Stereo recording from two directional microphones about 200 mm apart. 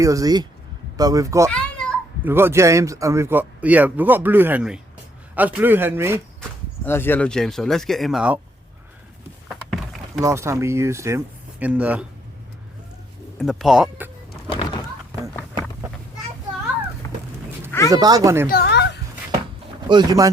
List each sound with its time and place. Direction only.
0.0 s speech: 15° right (ahead or behind)
1.5 s a sound: 5° left (ahead or behind)
2.2 s speech: 10° right (ahead or behind)
6.8 s speech: 10° left (ahead or behind)
10.2 s speech: 15° right (ahead or behind)
13.4 s speech: centre (ahead or behind)
17.0 s fowl: 20° left (ahead or behind)
17.7 s a sound: 15° left (ahead or behind)
17.9 s speech: 20° right (ahead or behind)
18.4 s a sound: 50° left (ahead or behind)
19.9 s speech: 20° right (ahead or behind)